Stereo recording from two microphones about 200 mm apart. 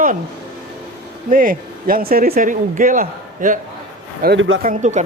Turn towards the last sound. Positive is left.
turn(degrees=-35)  # may be behind; listen again after turning